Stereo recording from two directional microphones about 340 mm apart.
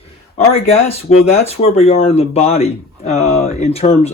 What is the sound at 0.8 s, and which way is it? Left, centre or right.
Speech, centre.